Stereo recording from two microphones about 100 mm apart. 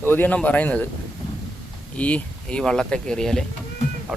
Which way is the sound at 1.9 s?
15° left (ahead or behind).